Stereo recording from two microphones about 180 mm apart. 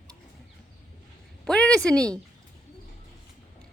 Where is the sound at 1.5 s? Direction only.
5° left (ahead or behind).